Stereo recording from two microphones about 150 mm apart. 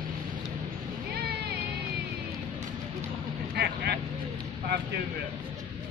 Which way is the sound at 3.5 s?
90° right.